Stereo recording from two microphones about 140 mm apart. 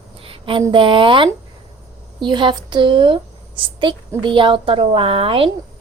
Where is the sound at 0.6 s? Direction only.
35° right (ahead or behind).